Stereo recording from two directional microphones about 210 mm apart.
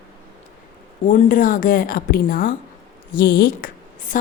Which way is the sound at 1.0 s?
35° left (ahead or behind).